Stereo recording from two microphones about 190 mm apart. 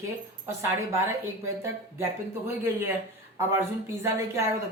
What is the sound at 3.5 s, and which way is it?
Speech, 15° right (ahead or behind).